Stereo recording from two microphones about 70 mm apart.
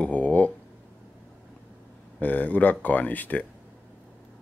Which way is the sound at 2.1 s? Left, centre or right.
Left.